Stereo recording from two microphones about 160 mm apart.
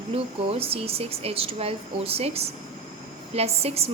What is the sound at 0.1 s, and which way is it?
A woman's voice, 35° right (ahead or behind).